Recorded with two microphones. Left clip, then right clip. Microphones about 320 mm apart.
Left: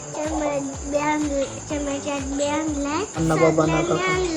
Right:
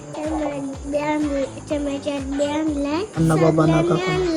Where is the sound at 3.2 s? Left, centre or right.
Right.